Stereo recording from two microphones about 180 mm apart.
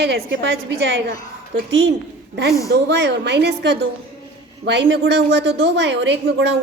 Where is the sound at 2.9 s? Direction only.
70° right (ahead or behind).